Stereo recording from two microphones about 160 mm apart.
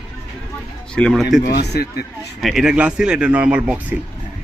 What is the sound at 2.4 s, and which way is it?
Speech, centre (ahead or behind).